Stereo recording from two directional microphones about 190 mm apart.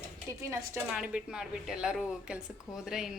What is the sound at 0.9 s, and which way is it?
Speech, 5° right (ahead or behind).